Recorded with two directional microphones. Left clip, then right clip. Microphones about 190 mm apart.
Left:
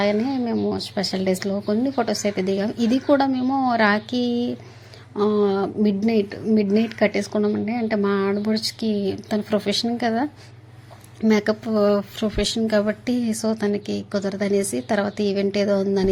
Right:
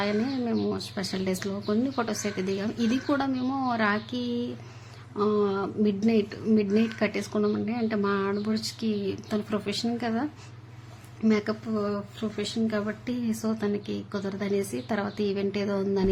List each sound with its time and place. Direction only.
0.0 s speech: 20° left (ahead or behind)
11.3 s speech: 30° left (ahead or behind)